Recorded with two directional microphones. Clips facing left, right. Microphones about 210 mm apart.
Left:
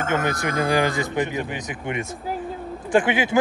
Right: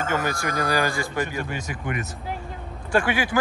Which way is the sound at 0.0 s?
20° left (ahead or behind).